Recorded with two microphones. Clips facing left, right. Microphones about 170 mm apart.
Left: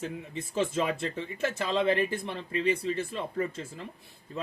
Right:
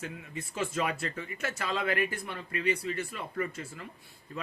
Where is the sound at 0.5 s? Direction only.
25° left (ahead or behind).